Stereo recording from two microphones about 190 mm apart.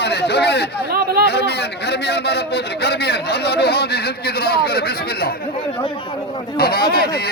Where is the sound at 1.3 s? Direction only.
60° left (ahead or behind).